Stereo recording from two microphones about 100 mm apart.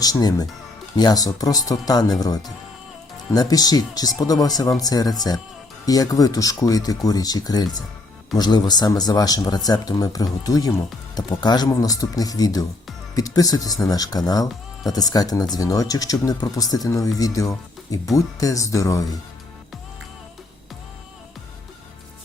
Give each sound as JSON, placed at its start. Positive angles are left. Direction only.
{"t": 0.0, "sound": "speech", "side_deg": 40}